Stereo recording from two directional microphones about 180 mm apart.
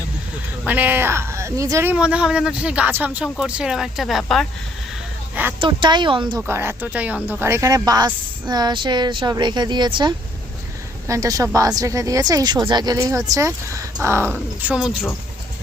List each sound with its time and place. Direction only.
0.6 s speech: 10° right (ahead or behind)
5.3 s a sound: 10° right (ahead or behind)
5.5 s speech: 25° right (ahead or behind)
6.5 s speech: 15° right (ahead or behind)